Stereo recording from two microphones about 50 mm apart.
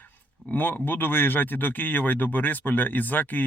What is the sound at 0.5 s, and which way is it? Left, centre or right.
Speech, left.